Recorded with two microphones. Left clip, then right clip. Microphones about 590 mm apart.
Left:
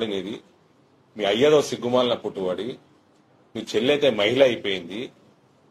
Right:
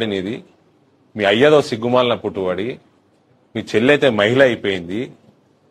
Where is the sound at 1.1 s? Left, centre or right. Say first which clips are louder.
Right 6 dB; right.